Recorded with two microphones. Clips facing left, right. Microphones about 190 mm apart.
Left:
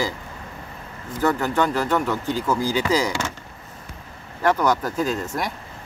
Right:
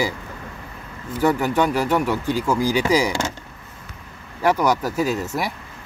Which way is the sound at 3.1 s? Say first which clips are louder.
Right 2 dB; 25° right (ahead or behind).